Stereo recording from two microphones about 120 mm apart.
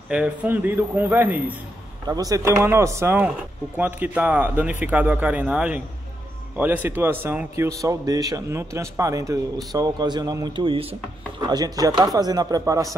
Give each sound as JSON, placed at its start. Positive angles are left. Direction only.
{"t": 0.1, "sound": "a man's voice", "side_deg": -10}
{"t": 2.0, "sound": "a man's voice", "side_deg": -30}
{"t": 11.4, "sound": "speech", "side_deg": -35}